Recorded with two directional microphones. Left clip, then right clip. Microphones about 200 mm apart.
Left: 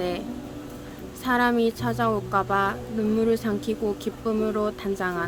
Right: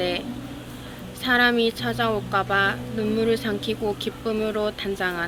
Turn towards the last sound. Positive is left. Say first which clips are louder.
# right 2 dB
turn(degrees=40)  # may be behind; listen again after turning